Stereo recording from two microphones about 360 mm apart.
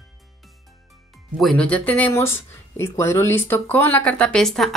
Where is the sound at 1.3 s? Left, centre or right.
Centre.